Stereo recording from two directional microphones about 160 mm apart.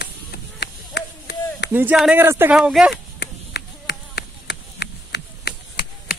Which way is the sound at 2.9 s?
90° left.